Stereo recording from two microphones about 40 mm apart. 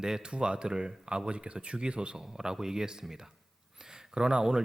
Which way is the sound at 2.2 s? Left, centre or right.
Centre.